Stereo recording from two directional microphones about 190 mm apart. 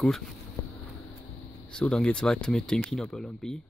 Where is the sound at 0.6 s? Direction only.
15° left (ahead or behind).